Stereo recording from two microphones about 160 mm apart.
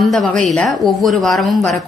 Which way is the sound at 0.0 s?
Centre (ahead or behind).